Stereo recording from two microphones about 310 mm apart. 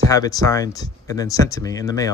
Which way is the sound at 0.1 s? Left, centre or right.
Centre.